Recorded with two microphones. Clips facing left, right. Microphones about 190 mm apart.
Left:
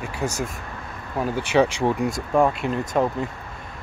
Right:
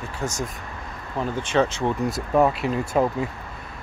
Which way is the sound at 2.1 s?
5° right (ahead or behind).